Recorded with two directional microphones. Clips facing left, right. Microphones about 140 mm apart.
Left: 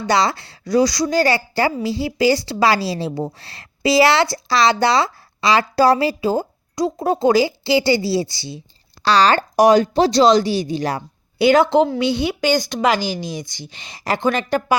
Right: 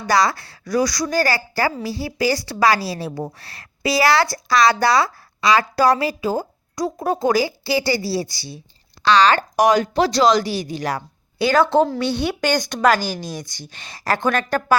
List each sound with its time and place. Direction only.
0.0 s a woman's voice: 25° left (ahead or behind)
9.0 s a woman's voice: 35° left (ahead or behind); by 14.8 s 10° left (ahead or behind)